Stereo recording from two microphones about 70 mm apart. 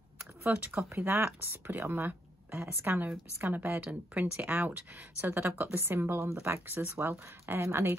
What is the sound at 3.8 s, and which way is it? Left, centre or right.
Speech, right.